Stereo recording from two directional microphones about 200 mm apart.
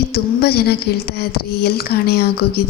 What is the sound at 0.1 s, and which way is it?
Speech, 50° left (ahead or behind).